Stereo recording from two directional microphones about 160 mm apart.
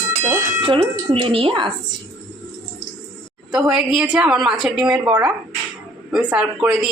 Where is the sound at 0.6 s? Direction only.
35° right (ahead or behind).